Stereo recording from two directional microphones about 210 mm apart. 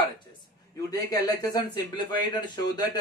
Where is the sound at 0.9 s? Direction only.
15° left (ahead or behind).